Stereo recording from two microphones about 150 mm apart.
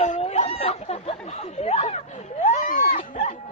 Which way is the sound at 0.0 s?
50° left (ahead or behind).